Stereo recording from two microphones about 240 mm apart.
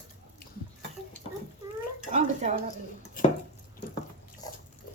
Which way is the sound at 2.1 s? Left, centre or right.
Right.